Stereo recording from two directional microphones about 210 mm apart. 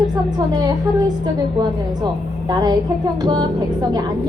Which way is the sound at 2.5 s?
20° right (ahead or behind).